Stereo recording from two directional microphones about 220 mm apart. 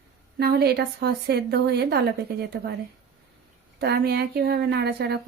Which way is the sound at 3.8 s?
45° right (ahead or behind).